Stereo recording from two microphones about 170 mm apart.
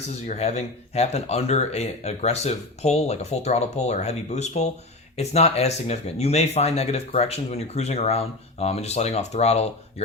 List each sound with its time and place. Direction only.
0.3 s speech: 40° left (ahead or behind)